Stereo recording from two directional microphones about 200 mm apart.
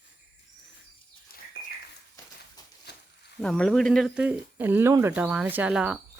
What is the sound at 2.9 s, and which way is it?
Snake, 55° left (ahead or behind).